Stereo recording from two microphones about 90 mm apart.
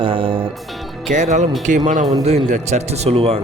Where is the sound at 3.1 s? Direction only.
90° right.